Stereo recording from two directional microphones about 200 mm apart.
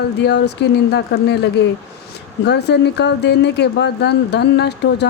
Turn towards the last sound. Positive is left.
turn(degrees=55)  # may be behind; listen again after turning